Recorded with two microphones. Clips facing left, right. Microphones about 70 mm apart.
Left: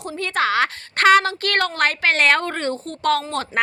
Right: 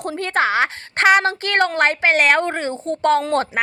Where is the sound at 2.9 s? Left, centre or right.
Right.